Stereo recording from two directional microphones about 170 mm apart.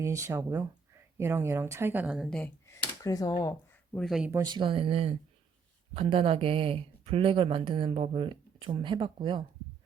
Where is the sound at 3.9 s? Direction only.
Centre (ahead or behind).